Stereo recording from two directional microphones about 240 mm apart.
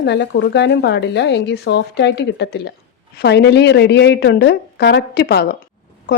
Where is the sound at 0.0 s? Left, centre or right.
Left.